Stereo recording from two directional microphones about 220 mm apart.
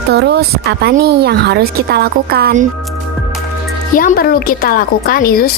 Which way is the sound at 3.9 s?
40° left (ahead or behind).